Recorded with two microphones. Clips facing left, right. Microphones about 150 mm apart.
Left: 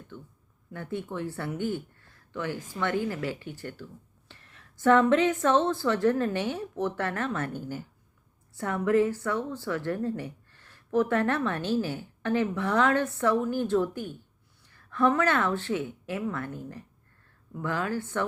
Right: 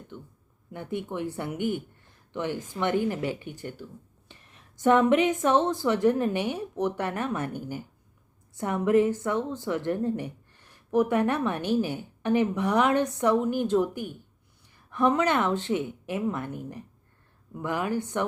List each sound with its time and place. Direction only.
0.1 s a woman's voice: 15° right (ahead or behind)